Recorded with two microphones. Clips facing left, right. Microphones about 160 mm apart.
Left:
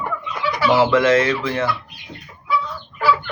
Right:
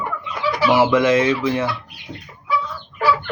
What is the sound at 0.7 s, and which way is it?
Speech, 15° right (ahead or behind).